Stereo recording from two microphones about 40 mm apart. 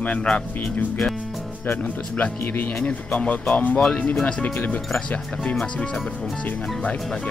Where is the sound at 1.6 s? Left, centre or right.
Left.